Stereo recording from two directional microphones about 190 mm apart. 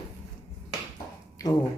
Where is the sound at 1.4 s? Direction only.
15° left (ahead or behind).